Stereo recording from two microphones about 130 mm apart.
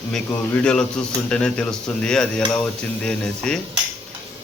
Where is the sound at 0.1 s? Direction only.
5° left (ahead or behind).